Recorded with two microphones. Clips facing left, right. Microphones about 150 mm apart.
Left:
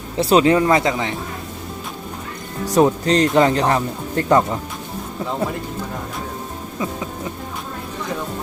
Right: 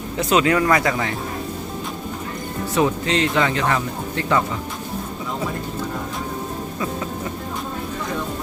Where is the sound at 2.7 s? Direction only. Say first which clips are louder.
Left 5 dB; 40° left (ahead or behind).